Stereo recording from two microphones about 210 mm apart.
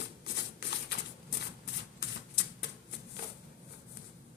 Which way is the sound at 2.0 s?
55° left (ahead or behind).